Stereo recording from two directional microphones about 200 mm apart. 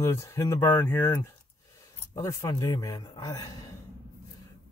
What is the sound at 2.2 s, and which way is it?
Speech, 15° left (ahead or behind).